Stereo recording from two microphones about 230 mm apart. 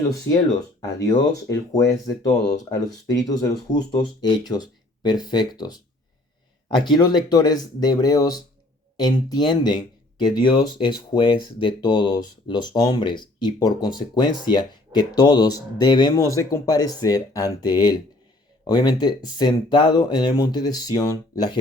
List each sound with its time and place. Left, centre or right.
0.9 s speech: centre
6.8 s speech: centre